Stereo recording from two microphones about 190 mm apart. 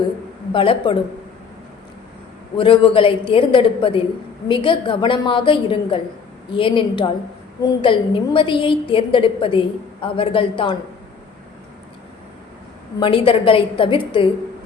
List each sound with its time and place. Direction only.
0.5 s a woman's voice: 30° left (ahead or behind)
2.6 s a woman's voice: 25° left (ahead or behind)
13.0 s a woman's voice: 25° left (ahead or behind)